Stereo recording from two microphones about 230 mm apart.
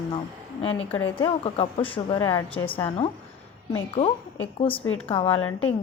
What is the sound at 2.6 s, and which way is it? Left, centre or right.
Speech, left.